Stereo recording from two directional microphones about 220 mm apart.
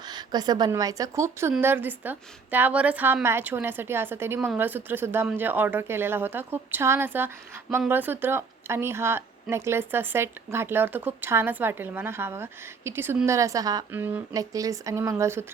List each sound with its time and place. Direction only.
0.0 s a woman's voice: 20° right (ahead or behind)